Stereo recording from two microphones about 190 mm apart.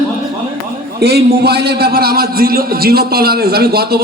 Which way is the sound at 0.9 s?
55° right (ahead or behind).